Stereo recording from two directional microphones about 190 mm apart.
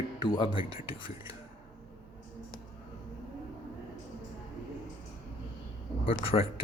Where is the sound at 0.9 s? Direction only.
30° left (ahead or behind).